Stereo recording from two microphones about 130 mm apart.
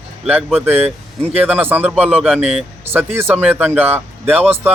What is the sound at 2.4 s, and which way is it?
Speech, 55° right (ahead or behind).